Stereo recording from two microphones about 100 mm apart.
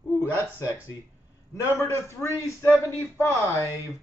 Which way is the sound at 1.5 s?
25° left (ahead or behind).